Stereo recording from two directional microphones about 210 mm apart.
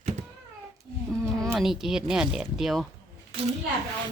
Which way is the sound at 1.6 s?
Centre (ahead or behind).